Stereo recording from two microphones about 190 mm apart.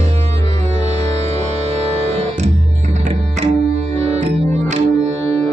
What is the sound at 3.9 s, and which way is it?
Music, 35° right (ahead or behind).